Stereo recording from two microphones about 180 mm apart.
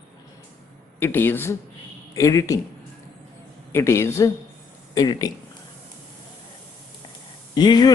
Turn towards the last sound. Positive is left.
turn(degrees=25)  # may be behind; listen again after turning